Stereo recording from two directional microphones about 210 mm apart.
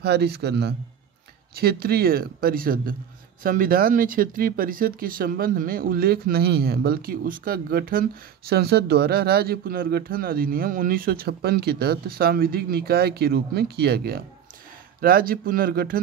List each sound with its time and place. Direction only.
0.0 s speech: 50° right (ahead or behind)